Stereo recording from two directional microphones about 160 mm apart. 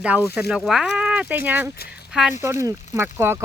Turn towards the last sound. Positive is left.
turn(degrees=-15)  # may be behind; listen again after turning